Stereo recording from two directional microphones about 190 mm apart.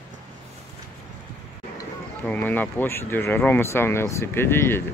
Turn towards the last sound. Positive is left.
turn(degrees=10)  # may be behind; listen again after turning